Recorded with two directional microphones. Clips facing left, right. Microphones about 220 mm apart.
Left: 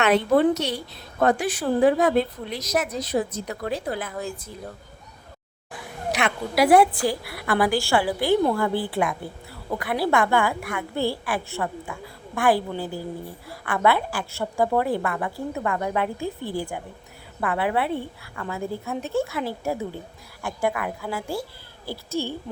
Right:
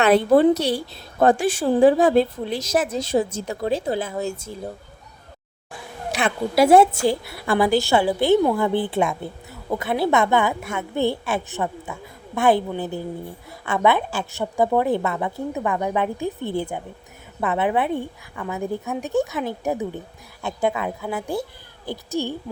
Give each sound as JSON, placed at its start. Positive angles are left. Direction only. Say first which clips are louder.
{"t": 0.0, "sound": "a woman's voice", "louder": "right 4 dB", "side_deg": -35}
{"t": 6.2, "sound": "a woman's voice", "louder": "right 3 dB", "side_deg": -25}